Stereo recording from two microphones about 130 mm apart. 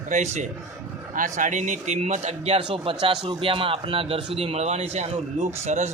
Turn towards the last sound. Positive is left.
turn(degrees=-60)  # may be behind; listen again after turning